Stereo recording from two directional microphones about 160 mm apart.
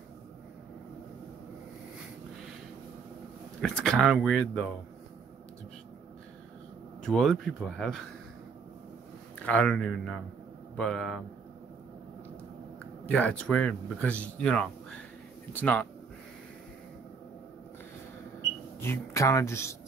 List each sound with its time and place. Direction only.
3.6 s speech: 5° left (ahead or behind)
7.0 s speech: centre (ahead or behind)
9.5 s speech: 5° left (ahead or behind)
13.0 s speech: 10° left (ahead or behind)
18.8 s speech: 15° left (ahead or behind)